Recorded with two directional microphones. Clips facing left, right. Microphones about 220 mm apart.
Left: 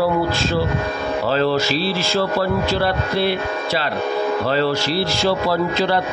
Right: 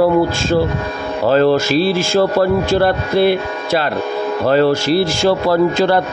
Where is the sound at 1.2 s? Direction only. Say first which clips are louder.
Right 7 dB; 50° right (ahead or behind).